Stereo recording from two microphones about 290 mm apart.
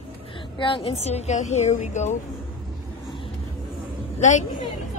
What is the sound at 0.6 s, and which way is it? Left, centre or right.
A woman's voice, centre.